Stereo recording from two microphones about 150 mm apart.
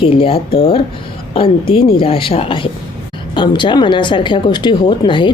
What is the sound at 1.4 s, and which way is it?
Speech, 35° left (ahead or behind).